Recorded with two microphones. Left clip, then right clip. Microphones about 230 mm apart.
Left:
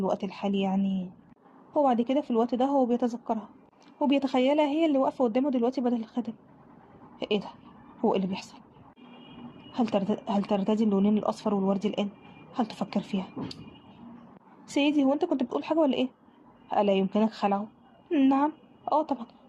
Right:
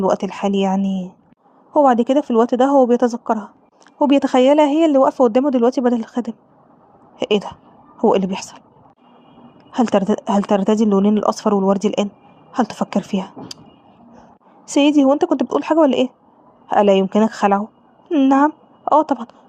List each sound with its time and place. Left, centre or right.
0.0 s speech: right
9.7 s speech: right
14.7 s a woman's voice: right